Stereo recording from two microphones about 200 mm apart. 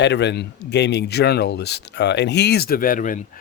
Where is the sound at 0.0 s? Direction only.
60° left (ahead or behind).